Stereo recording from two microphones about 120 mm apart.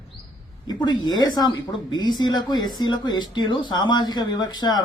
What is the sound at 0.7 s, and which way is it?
A woman's voice, 40° left (ahead or behind).